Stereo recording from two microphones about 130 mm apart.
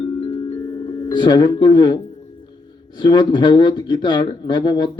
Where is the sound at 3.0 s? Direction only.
35° left (ahead or behind).